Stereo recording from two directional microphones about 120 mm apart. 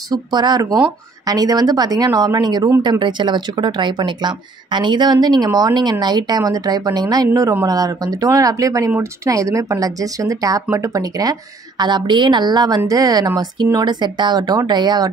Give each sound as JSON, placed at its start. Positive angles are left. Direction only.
{"t": 0.1, "sound": "a woman's voice", "side_deg": -35}